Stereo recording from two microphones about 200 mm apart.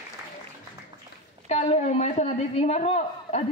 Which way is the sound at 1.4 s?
35° left (ahead or behind).